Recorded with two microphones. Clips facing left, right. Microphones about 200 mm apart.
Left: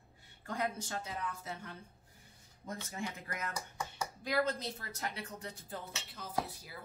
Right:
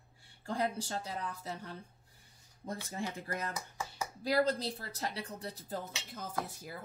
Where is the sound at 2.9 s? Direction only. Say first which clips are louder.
Right 4 dB; 30° right (ahead or behind).